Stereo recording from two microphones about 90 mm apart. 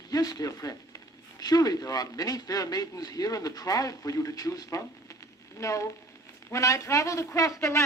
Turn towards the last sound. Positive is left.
turn(degrees=35)  # may be behind; listen again after turning